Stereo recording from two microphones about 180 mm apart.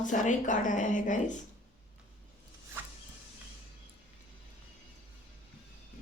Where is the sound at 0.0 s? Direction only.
45° left (ahead or behind).